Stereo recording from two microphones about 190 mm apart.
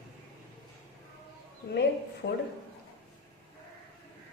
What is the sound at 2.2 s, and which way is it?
Speech, 65° left (ahead or behind).